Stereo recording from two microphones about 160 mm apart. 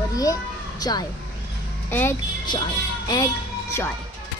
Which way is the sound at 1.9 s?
15° left (ahead or behind).